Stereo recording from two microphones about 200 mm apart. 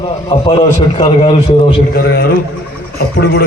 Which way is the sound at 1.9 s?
50° left (ahead or behind).